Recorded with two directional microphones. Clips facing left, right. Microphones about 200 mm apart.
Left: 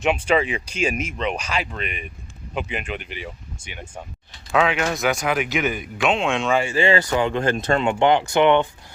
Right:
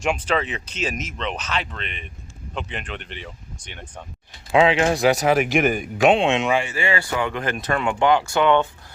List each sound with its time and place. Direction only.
0.0 s speech: 5° left (ahead or behind)
4.5 s speech: 30° right (ahead or behind)
6.2 s speech: 20° right (ahead or behind)
6.7 s speech: 25° left (ahead or behind)